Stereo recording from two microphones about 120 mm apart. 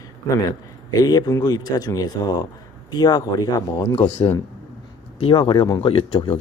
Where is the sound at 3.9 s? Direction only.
50° left (ahead or behind); by 5.8 s 35° left (ahead or behind).